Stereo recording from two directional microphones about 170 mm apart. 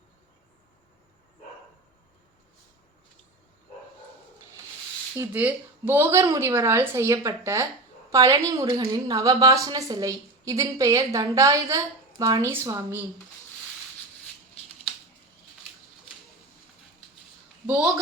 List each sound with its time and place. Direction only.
5.1 s a woman's voice: 15° right (ahead or behind)